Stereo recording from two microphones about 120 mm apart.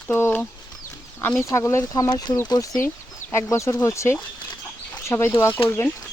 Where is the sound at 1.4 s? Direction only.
25° left (ahead or behind).